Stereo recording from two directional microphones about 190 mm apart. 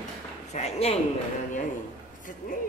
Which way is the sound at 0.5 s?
35° left (ahead or behind).